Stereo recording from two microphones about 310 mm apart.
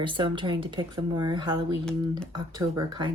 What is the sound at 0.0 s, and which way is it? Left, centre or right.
Speech, centre.